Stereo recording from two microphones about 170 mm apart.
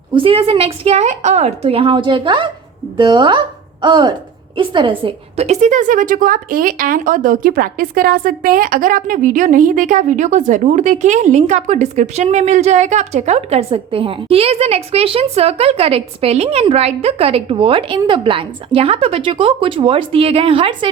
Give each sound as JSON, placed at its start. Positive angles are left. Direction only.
{"t": 0.1, "sound": "a woman's voice", "side_deg": -30}